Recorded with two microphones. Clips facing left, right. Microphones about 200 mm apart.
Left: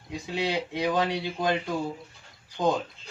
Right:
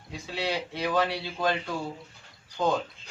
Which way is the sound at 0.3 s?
15° left (ahead or behind).